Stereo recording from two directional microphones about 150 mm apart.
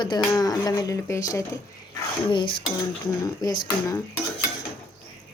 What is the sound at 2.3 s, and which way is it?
Cutlery, 35° left (ahead or behind).